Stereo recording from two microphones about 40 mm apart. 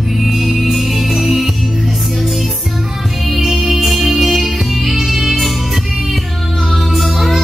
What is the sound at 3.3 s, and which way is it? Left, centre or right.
Music, centre.